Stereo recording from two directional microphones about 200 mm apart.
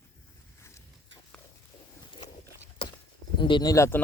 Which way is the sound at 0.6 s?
15° left (ahead or behind).